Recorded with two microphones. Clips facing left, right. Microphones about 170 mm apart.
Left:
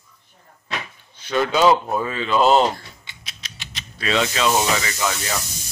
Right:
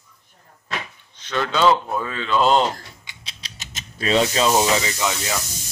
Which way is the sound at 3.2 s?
30° right (ahead or behind).